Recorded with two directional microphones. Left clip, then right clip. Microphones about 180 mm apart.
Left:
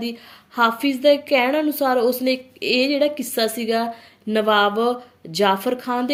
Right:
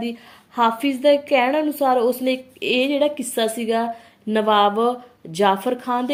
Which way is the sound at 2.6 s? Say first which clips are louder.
Even; 50° left (ahead or behind).